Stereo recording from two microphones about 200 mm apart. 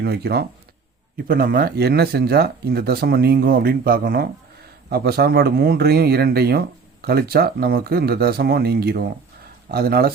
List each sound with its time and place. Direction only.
0.0 s speech: 55° right (ahead or behind)